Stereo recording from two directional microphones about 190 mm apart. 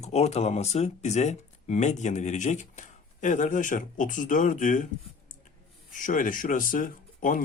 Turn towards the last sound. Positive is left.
turn(degrees=45)  # may be behind; listen again after turning